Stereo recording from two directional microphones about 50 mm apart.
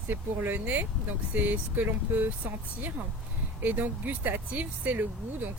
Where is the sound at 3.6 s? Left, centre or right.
Right.